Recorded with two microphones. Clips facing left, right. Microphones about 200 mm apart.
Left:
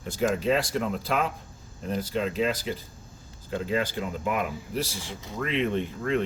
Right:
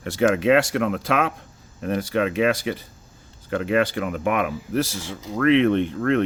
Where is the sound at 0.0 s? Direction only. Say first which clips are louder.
Right 6 dB; 75° right (ahead or behind).